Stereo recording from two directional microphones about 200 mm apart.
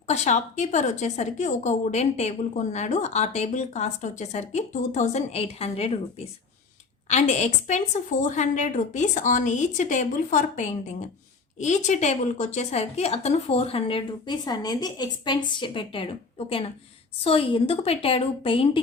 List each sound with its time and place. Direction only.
0.1 s a woman's voice: 35° left (ahead or behind)